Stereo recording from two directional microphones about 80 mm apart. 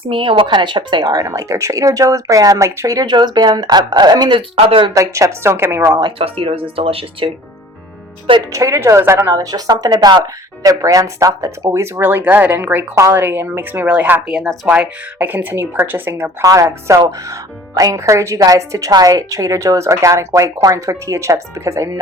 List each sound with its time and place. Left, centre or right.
0.1 s speech: right
1.0 s speech: right
1.3 s speech: right
2.9 s speech: right
4.9 s speech: right
7.2 s speech: right
8.5 s speech: right
9.3 s speech: right
13.9 s speech: centre
16.4 s speech: right